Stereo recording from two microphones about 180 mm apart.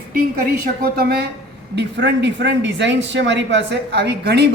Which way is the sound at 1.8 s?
75° right (ahead or behind).